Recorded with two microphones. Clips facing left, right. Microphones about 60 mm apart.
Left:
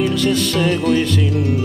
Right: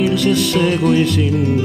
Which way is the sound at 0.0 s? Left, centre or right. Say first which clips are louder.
Right 2 dB; centre.